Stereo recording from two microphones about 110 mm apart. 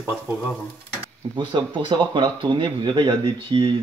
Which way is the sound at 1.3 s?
45° right (ahead or behind).